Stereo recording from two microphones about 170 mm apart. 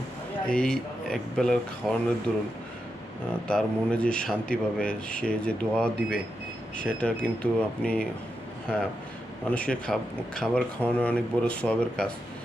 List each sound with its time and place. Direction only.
0.4 s speech: 5° left (ahead or behind)
3.4 s speech: 5° left (ahead or behind)
9.5 s speech: 5° left (ahead or behind)